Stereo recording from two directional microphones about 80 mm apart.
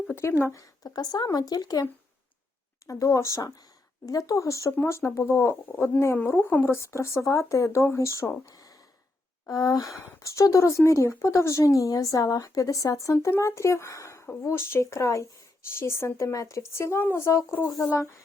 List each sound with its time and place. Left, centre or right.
0.2 s a woman's voice: left
6.7 s speech: left
8.4 s a sound: left
9.5 s a woman's voice: left